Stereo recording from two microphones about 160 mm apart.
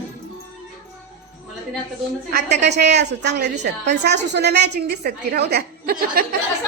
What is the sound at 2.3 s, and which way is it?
A woman's voice, 90° right.